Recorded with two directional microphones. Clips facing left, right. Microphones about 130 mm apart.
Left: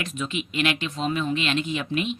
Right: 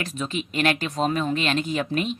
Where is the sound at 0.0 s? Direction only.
35° right (ahead or behind).